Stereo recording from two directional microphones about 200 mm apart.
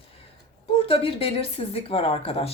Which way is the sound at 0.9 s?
30° left (ahead or behind).